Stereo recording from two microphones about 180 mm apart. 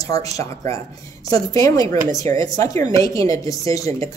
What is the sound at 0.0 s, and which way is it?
Speech, 20° left (ahead or behind).